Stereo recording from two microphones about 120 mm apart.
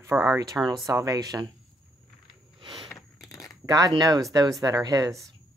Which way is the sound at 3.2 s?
30° left (ahead or behind).